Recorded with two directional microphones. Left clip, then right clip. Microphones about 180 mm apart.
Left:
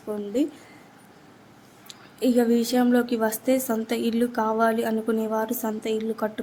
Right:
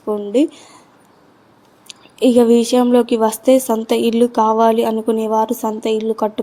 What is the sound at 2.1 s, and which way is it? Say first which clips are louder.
A woman's voice: right 10 dB; 25° right (ahead or behind).